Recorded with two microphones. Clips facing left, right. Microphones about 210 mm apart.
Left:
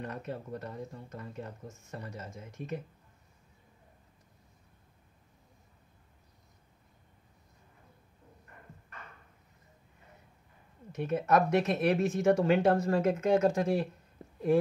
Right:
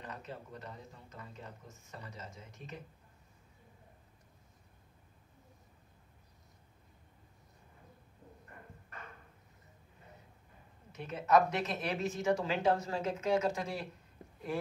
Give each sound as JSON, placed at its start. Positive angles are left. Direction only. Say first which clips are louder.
{"t": 0.0, "sound": "speech", "louder": "left 7 dB", "side_deg": 55}
{"t": 10.9, "sound": "speech", "louder": "left 2 dB", "side_deg": 50}